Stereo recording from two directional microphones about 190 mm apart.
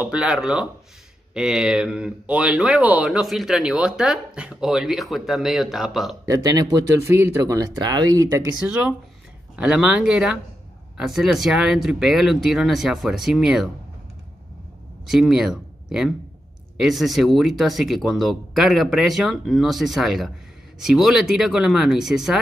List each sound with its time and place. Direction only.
0.0 s speech: 5° right (ahead or behind)
6.2 s speech: 20° right (ahead or behind)
8.5 s speech: 5° right (ahead or behind)
15.0 s speech: centre (ahead or behind)